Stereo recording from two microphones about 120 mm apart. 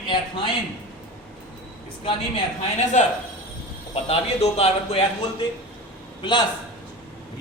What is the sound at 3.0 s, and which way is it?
Speech, 80° left.